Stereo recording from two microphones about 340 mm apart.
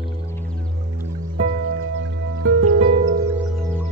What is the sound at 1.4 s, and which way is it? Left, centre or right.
Music, right.